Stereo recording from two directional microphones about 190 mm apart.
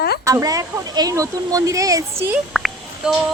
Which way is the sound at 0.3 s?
15° right (ahead or behind).